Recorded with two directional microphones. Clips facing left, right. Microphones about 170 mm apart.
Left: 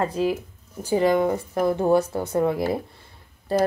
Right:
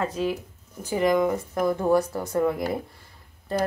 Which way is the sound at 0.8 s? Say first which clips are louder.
Left 2 dB; 30° left (ahead or behind).